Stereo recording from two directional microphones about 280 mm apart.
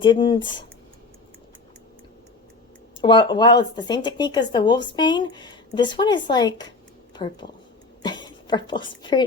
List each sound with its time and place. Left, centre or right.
0.0 s speech: centre
3.0 s a woman's voice: centre